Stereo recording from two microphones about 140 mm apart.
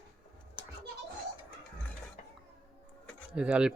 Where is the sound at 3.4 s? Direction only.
5° right (ahead or behind).